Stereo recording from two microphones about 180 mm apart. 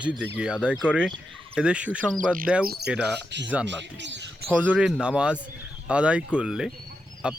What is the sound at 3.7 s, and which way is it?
Speech, 80° right.